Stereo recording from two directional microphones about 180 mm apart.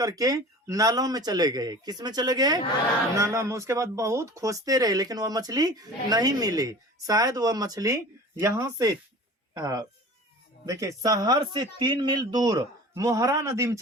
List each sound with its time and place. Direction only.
0.0 s speech: 20° right (ahead or behind)